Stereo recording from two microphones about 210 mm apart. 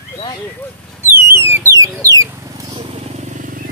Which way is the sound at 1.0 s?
10° right (ahead or behind).